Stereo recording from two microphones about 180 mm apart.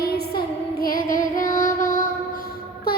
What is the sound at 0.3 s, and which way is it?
Child singing, 55° left (ahead or behind).